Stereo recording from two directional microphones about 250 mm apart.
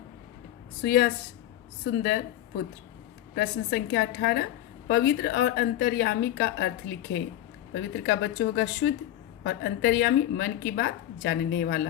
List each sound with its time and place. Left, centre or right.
0.8 s a woman's voice: left
3.3 s a woman's voice: left